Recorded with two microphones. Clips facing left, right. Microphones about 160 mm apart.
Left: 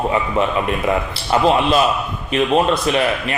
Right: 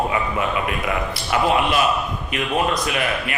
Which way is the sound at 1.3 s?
25° left (ahead or behind).